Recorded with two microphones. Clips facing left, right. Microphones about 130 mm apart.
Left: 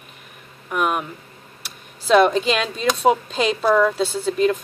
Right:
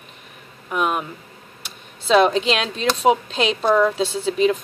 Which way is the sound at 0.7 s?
Centre (ahead or behind).